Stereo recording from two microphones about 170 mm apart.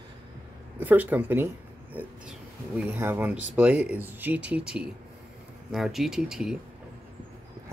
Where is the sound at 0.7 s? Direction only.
10° right (ahead or behind).